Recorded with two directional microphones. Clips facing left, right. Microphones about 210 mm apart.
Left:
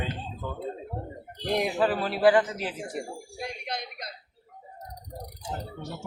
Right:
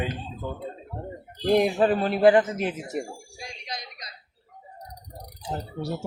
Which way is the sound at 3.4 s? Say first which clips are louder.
Left 5 dB; 55° left (ahead or behind).